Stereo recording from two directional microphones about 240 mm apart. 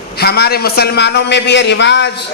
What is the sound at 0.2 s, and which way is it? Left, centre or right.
A man's voice, left.